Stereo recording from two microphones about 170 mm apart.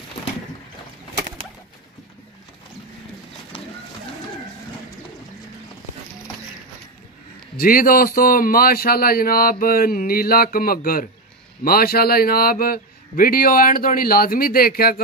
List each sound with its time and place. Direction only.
7.5 s a man's voice: 55° left (ahead or behind)